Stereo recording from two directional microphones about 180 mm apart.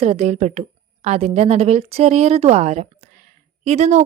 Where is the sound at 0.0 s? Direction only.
35° right (ahead or behind).